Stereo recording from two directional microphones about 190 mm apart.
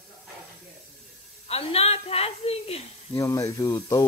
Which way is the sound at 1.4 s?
30° left (ahead or behind).